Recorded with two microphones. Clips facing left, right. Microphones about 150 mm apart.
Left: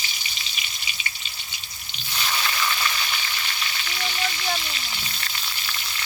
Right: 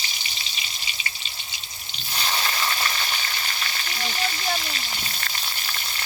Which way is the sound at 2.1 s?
30° right (ahead or behind).